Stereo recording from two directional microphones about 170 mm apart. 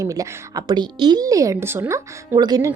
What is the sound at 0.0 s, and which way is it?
A woman's voice, 20° right (ahead or behind).